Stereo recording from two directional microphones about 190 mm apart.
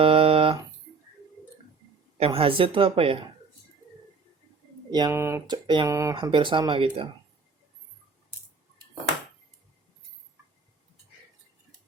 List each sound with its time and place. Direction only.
0.0 s a sound: 30° right (ahead or behind)
2.1 s speech: 30° right (ahead or behind)
4.9 s speech: 20° right (ahead or behind)